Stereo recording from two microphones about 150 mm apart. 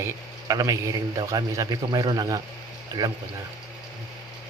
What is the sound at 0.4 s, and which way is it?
A man's voice, 25° right (ahead or behind).